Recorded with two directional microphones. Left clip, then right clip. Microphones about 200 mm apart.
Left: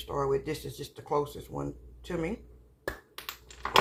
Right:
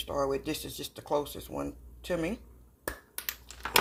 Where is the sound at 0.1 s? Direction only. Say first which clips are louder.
Left 2 dB; 40° right (ahead or behind).